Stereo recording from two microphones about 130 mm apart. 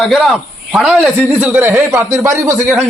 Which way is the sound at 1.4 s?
15° right (ahead or behind).